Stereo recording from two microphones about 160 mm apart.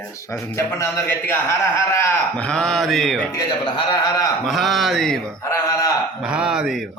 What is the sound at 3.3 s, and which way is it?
A man's voice, 25° left (ahead or behind).